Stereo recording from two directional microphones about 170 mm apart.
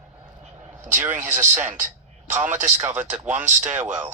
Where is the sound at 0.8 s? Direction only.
10° right (ahead or behind).